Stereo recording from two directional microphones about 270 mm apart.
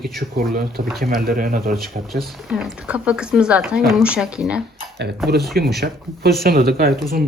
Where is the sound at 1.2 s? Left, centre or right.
Right.